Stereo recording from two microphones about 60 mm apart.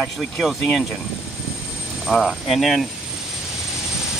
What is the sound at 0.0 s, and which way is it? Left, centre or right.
Speech, centre.